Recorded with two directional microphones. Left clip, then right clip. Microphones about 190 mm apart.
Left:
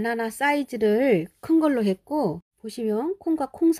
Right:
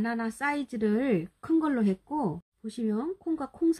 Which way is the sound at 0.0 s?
40° left (ahead or behind).